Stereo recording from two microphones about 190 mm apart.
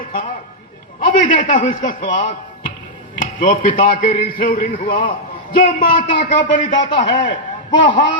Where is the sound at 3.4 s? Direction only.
45° left (ahead or behind).